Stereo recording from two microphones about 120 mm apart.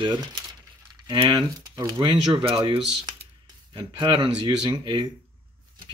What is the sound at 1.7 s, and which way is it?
Speech, 25° right (ahead or behind).